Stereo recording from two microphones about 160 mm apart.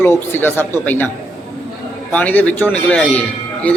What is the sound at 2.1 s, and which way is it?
A man's voice, 10° left (ahead or behind).